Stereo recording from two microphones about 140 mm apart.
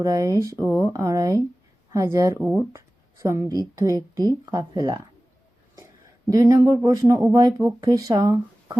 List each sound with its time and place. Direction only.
0.0 s a woman's voice: 25° right (ahead or behind)
6.3 s speech: 25° right (ahead or behind)